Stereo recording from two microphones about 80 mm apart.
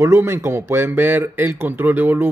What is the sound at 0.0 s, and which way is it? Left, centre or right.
Speech, right.